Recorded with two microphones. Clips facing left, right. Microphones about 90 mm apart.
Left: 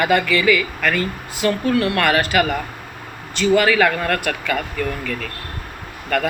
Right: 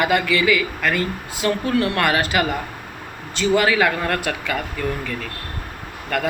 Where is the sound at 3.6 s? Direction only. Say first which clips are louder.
Left 2 dB; 15° right (ahead or behind).